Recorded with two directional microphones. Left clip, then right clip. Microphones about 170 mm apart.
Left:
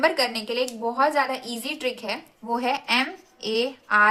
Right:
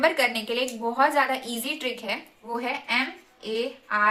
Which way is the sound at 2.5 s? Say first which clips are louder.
Left 3 dB; 35° left (ahead or behind).